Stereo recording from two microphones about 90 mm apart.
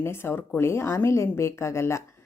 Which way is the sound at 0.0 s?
25° left (ahead or behind).